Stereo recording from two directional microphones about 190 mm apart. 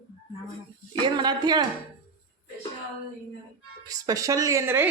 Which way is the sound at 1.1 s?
20° right (ahead or behind).